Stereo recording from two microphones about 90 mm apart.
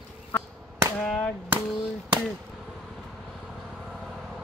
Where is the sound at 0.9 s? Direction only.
15° left (ahead or behind).